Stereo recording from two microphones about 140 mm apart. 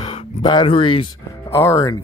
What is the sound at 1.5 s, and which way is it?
Speech, 20° left (ahead or behind).